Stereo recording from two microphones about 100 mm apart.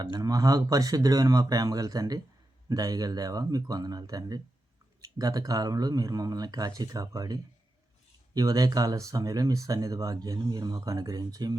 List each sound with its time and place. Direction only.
0.0 s speech: 40° right (ahead or behind)